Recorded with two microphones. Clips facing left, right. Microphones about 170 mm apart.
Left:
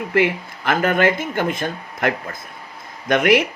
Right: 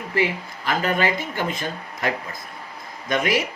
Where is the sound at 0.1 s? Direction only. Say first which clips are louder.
Left 4 dB; 60° left (ahead or behind).